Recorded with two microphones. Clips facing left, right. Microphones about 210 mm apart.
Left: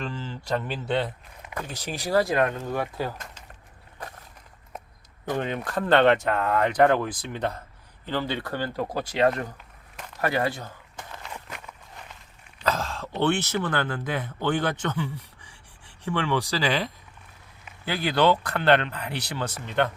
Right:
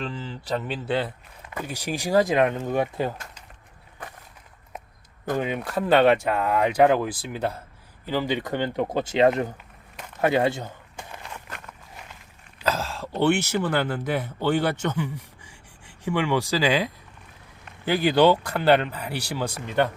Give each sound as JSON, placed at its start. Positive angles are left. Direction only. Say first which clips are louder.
{"t": 0.0, "sound": "speech", "louder": "right 1 dB", "side_deg": 0}
{"t": 5.3, "sound": "speech", "louder": "right 2 dB", "side_deg": -10}
{"t": 10.9, "sound": "walk", "louder": "right 1 dB", "side_deg": -15}
{"t": 11.4, "sound": "walk", "louder": "even", "side_deg": 5}
{"t": 12.5, "sound": "speech", "louder": "right 1 dB", "side_deg": -5}